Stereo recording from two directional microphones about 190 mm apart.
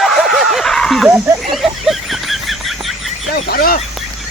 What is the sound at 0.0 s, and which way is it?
Snicker, centre (ahead or behind).